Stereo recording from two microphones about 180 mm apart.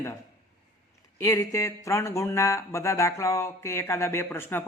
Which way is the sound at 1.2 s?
20° left (ahead or behind).